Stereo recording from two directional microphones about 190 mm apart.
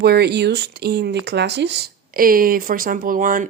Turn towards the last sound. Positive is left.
turn(degrees=-45)  # may be behind; listen again after turning